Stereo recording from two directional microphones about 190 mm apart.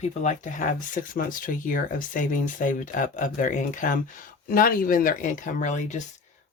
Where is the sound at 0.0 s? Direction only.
40° left (ahead or behind).